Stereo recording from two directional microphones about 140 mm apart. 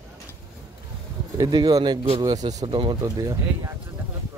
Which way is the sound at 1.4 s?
30° right (ahead or behind).